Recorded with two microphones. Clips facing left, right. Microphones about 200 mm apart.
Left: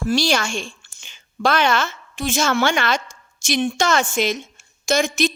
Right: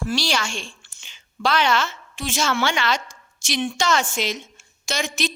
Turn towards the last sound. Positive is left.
turn(degrees=50)  # may be behind; listen again after turning